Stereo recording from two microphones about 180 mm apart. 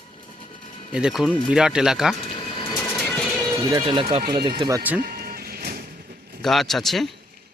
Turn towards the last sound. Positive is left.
turn(degrees=0)  # may be behind; listen again after turning